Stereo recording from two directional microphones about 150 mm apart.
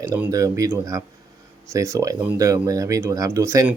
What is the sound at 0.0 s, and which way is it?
Speech, 20° right (ahead or behind).